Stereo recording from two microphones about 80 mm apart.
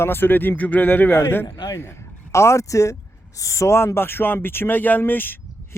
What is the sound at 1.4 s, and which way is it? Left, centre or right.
Speech, left.